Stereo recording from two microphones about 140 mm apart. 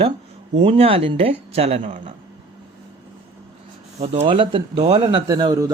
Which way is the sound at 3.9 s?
45° right (ahead or behind).